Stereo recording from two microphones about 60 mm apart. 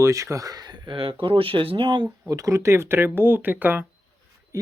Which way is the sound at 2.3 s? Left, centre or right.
Right.